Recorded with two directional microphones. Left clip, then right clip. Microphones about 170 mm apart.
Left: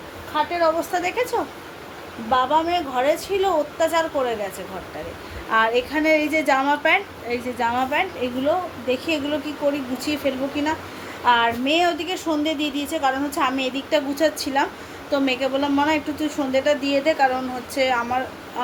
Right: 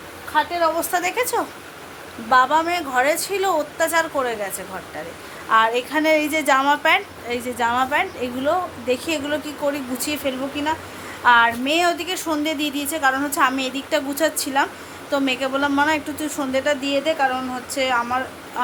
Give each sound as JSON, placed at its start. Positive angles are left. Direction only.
{"t": 0.6, "sound": "a woman's voice", "side_deg": -15}
{"t": 5.5, "sound": "a woman's voice", "side_deg": -5}